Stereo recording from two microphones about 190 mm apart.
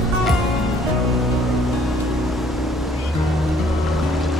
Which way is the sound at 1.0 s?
Centre (ahead or behind).